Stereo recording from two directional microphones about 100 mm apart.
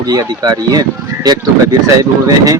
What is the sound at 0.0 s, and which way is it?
Speech, 40° right (ahead or behind).